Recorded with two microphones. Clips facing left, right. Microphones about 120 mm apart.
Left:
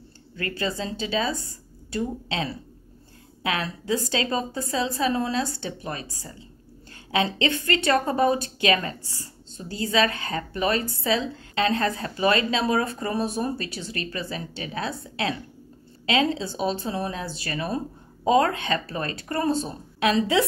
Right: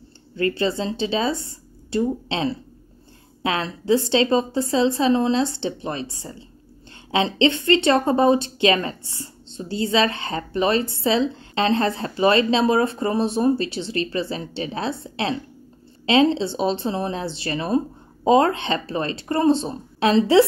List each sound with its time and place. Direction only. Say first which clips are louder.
0.4 s speech: right 7 dB; 30° right (ahead or behind)